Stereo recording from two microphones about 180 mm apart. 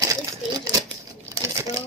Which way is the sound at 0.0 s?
15° right (ahead or behind).